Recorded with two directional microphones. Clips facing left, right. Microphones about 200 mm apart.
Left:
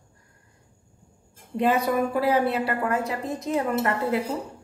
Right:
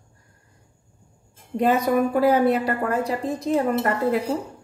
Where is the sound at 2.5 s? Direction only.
35° right (ahead or behind).